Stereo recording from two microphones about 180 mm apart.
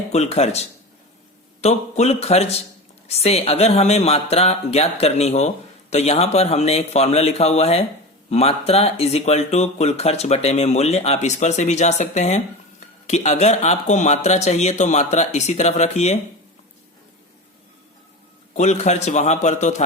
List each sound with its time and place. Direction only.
0.1 s speech: 35° left (ahead or behind)
1.6 s speech: 35° left (ahead or behind)
18.5 s speech: 40° left (ahead or behind)